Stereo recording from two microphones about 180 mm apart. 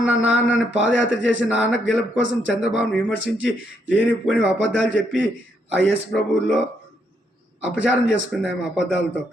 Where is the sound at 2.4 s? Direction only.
5° right (ahead or behind).